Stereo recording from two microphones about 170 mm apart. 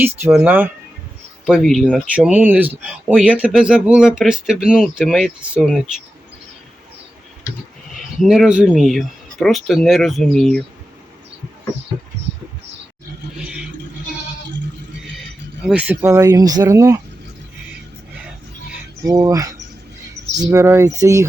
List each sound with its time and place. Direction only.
0.0 s speech: 15° right (ahead or behind)
1.5 s speech: centre (ahead or behind)
7.9 s speech: centre (ahead or behind)
13.4 s a sound: 5° right (ahead or behind)
15.6 s speech: 5° right (ahead or behind)
19.0 s a sound: 20° right (ahead or behind)
20.4 s speech: 20° right (ahead or behind)